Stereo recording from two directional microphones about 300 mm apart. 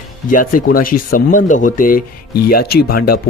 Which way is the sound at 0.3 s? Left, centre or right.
Left.